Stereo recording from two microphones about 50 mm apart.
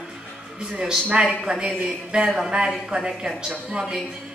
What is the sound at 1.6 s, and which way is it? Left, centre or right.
A woman's voice, centre.